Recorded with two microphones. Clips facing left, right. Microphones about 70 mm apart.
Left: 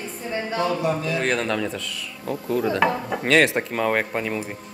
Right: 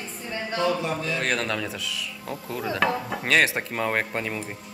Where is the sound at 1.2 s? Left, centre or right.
Centre.